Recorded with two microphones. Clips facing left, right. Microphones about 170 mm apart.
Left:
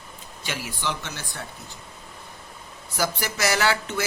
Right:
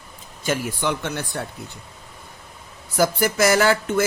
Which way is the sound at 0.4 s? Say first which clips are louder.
Right 7 dB; 50° right (ahead or behind).